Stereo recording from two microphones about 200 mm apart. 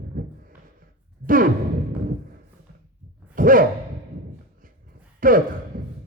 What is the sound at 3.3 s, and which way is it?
Sigh, 45° right (ahead or behind).